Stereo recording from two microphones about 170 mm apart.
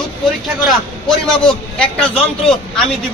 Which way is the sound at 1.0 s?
5° left (ahead or behind).